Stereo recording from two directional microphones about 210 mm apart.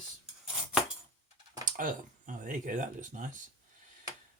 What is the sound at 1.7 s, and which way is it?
Speech, 40° right (ahead or behind).